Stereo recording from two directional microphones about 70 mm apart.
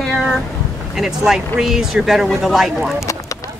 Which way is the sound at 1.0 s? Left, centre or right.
Centre.